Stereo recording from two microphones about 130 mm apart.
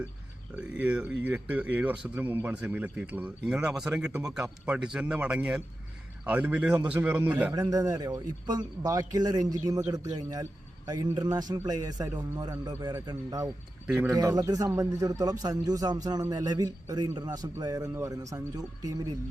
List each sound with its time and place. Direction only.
0.5 s speech: 10° right (ahead or behind)
7.5 s a man's voice: 30° right (ahead or behind)
13.8 s speech: 10° right (ahead or behind)
14.1 s a man's voice: 30° right (ahead or behind)